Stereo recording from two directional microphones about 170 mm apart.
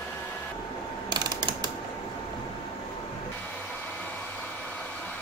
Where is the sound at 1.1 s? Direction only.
25° right (ahead or behind).